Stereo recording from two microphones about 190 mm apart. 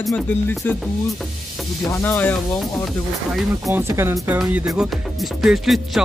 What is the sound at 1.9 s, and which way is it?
Speech, 10° left (ahead or behind).